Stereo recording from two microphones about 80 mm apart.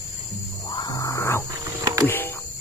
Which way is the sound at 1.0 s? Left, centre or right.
Left.